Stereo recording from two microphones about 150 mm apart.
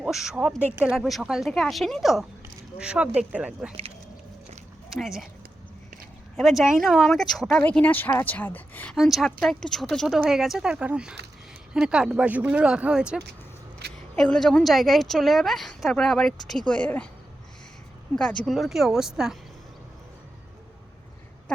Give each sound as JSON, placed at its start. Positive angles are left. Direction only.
{"t": 0.0, "sound": "a woman's voice", "side_deg": 0}
{"t": 4.9, "sound": "a woman's voice", "side_deg": 0}
{"t": 6.3, "sound": "a woman's voice", "side_deg": 0}
{"t": 9.0, "sound": "a woman's voice", "side_deg": 0}
{"t": 13.8, "sound": "single-lens reflex camera", "side_deg": -90}
{"t": 14.2, "sound": "a woman's voice", "side_deg": 5}
{"t": 18.2, "sound": "a woman's voice", "side_deg": 5}